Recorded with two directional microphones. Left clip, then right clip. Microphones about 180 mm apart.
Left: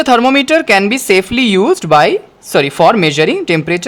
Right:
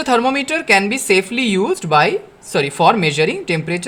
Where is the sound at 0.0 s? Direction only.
30° left (ahead or behind).